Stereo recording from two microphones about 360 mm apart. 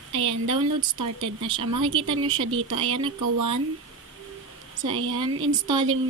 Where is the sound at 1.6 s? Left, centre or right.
Right.